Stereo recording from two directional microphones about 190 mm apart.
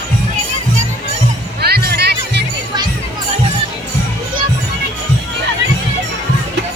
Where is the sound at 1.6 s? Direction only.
55° right (ahead or behind).